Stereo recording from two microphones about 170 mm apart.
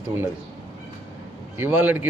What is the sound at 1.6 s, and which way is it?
Speech, 10° right (ahead or behind).